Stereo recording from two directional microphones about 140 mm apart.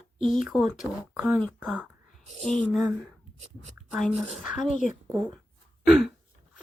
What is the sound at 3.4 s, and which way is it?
Speech, 55° right (ahead or behind).